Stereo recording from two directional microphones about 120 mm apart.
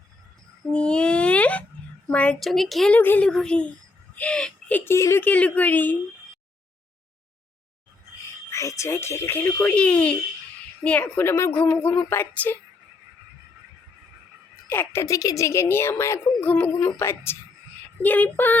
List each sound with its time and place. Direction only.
0.7 s a sound: 10° left (ahead or behind)
2.0 s a woman's voice: 10° left (ahead or behind)
2.9 s speech: 15° left (ahead or behind)
4.9 s speech: 20° left (ahead or behind)
8.4 s a woman's voice: 25° left (ahead or behind)
14.7 s a woman's voice: 20° left (ahead or behind)